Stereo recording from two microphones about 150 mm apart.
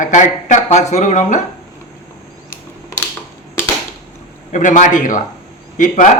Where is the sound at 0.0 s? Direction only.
55° left (ahead or behind).